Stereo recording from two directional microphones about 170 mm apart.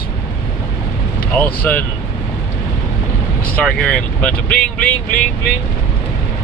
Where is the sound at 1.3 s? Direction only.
10° left (ahead or behind).